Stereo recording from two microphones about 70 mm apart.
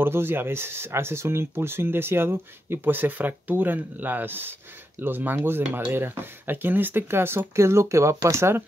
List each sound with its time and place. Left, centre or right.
0.0 s speech: right